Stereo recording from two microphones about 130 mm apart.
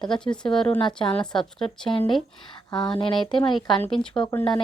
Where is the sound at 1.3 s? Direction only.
5° left (ahead or behind).